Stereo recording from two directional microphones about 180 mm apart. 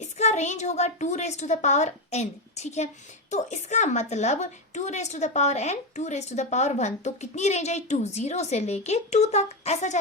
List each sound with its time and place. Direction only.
0.0 s a woman's voice: 40° left (ahead or behind)